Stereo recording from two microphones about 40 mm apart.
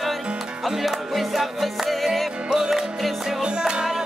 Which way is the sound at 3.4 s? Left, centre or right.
Right.